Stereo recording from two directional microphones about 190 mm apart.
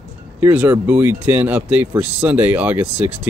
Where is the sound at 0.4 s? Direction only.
10° right (ahead or behind).